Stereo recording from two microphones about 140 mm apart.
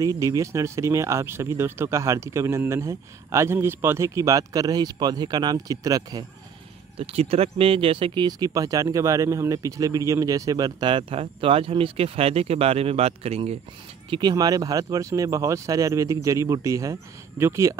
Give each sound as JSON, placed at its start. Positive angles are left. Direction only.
{"t": 0.0, "sound": "speech", "side_deg": -25}
{"t": 7.0, "sound": "speech", "side_deg": -45}
{"t": 14.3, "sound": "speech", "side_deg": -25}